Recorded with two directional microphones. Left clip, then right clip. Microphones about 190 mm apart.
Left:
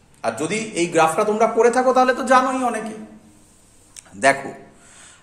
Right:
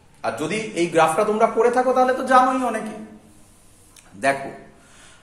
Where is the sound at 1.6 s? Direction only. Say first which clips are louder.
Left 4 dB; 40° left (ahead or behind).